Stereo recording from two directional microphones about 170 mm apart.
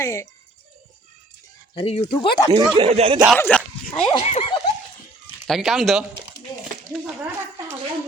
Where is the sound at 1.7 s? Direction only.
35° left (ahead or behind).